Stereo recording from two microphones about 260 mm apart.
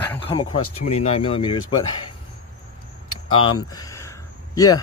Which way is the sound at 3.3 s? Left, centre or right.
Left.